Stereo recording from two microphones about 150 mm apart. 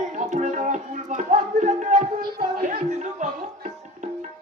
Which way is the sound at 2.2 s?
90° right.